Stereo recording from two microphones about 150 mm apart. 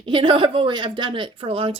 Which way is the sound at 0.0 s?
35° right (ahead or behind).